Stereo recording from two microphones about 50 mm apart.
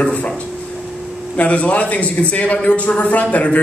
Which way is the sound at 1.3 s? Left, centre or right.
Left.